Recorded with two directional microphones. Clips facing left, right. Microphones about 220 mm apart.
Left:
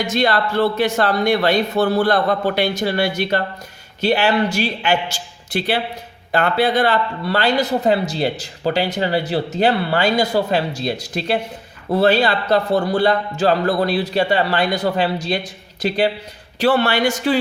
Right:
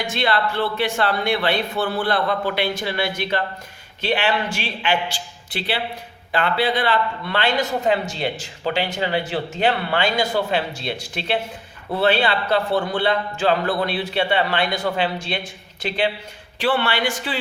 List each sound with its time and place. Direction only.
0.0 s a man's voice: 40° left (ahead or behind)